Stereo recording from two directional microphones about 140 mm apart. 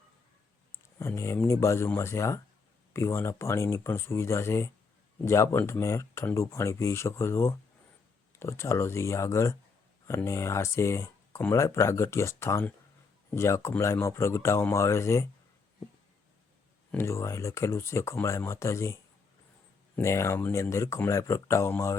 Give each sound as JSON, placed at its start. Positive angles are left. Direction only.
{"t": 0.9, "sound": "speech", "side_deg": 20}
{"t": 16.9, "sound": "speech", "side_deg": 20}
{"t": 20.0, "sound": "speech", "side_deg": 20}